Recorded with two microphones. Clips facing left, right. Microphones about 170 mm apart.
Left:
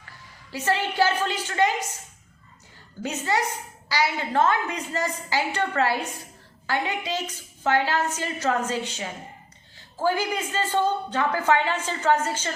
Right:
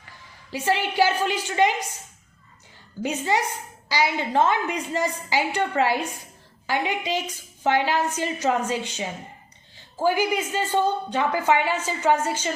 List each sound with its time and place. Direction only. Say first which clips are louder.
0.5 s a woman's voice: right 2 dB; 15° right (ahead or behind)
3.0 s a woman's voice: right 2 dB; 15° right (ahead or behind)